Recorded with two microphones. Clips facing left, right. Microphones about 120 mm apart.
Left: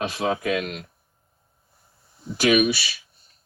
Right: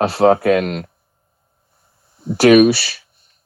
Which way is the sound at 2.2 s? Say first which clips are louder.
Right 10 dB; 65° right (ahead or behind).